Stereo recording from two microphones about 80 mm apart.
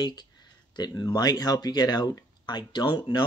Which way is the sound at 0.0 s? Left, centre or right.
Left.